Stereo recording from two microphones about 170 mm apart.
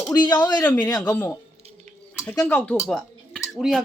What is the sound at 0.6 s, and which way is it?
Speech, 10° left (ahead or behind).